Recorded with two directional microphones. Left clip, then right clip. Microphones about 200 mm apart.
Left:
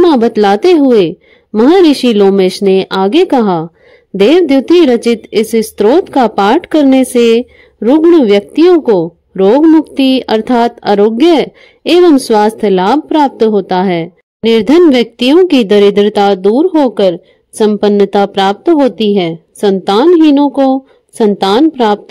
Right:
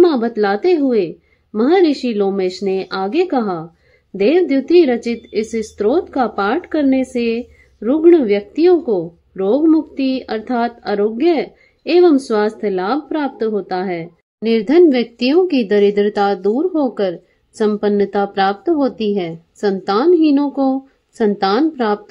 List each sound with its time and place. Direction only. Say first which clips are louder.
0.0 s a woman's voice: left 6 dB; 50° left (ahead or behind)